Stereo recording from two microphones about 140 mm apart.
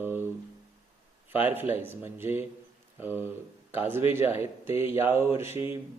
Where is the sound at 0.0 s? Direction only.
15° right (ahead or behind).